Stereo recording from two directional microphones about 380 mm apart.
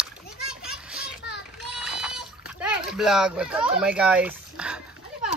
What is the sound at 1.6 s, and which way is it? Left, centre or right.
Splash, centre.